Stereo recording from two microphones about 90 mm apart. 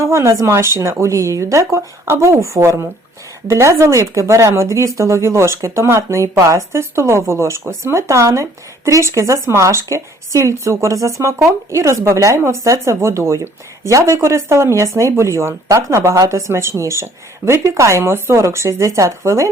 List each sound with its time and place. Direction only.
0.0 s speech: 35° right (ahead or behind)